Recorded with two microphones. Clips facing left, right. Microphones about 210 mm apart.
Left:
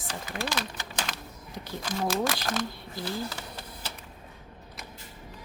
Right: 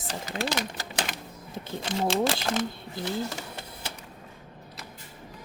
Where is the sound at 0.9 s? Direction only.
20° right (ahead or behind).